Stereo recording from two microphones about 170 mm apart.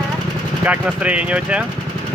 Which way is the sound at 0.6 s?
10° right (ahead or behind).